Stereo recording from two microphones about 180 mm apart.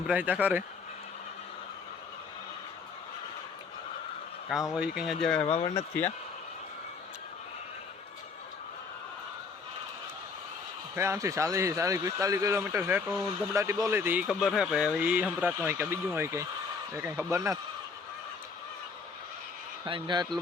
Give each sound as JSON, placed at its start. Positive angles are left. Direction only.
{"t": 0.1, "sound": "speech", "side_deg": -10}
{"t": 4.7, "sound": "speech", "side_deg": -5}
{"t": 5.6, "sound": "speech", "side_deg": 15}
{"t": 10.9, "sound": "speech", "side_deg": -15}
{"t": 19.8, "sound": "a man's voice", "side_deg": -25}